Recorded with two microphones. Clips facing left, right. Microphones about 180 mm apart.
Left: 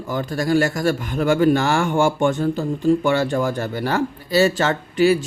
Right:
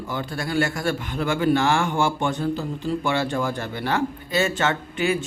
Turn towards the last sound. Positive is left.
turn(degrees=35)  # may be behind; listen again after turning